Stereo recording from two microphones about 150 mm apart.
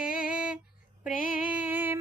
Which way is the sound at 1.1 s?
65° left (ahead or behind).